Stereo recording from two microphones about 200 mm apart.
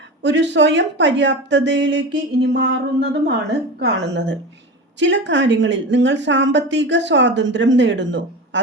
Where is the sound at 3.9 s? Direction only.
60° right (ahead or behind).